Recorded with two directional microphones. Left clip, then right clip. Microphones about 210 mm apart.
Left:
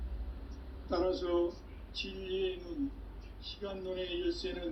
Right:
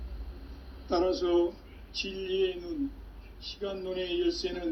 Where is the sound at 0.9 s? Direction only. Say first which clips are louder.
Right 5 dB; 45° right (ahead or behind).